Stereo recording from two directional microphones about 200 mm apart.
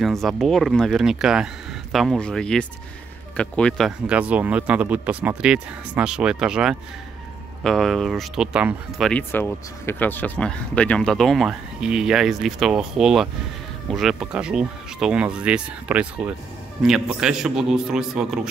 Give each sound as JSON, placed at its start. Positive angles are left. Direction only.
{"t": 0.0, "sound": "speech", "side_deg": 0}